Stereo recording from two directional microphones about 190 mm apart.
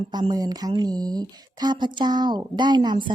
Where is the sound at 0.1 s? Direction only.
20° right (ahead or behind).